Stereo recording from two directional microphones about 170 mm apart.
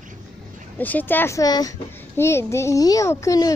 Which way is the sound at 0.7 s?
10° left (ahead or behind).